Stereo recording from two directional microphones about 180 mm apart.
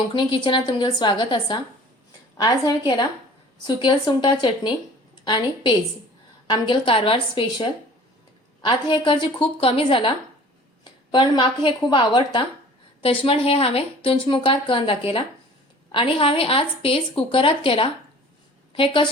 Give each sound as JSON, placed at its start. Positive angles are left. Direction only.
{"t": 0.1, "sound": "a woman's voice", "side_deg": 25}